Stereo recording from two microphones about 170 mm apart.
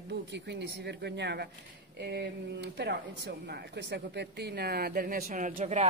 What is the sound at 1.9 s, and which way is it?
Speech, 75° right (ahead or behind).